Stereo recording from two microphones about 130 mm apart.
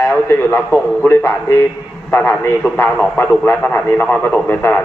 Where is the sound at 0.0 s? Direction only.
15° left (ahead or behind).